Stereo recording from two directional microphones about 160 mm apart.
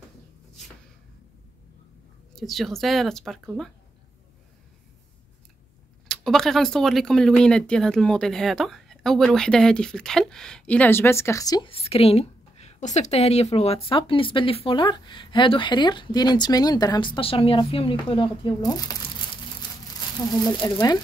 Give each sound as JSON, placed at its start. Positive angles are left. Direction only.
{"t": 2.3, "sound": "speech", "side_deg": 0}
{"t": 6.0, "sound": "speech", "side_deg": 5}
{"t": 11.7, "sound": "a woman's voice", "side_deg": 40}
{"t": 20.4, "sound": "speech", "side_deg": 30}